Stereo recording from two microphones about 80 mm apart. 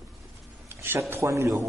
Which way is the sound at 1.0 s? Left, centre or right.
Right.